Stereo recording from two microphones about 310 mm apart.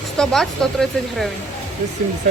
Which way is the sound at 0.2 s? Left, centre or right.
Centre.